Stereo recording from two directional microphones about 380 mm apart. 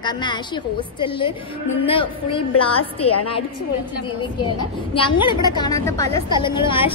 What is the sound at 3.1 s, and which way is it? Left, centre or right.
Speech, left.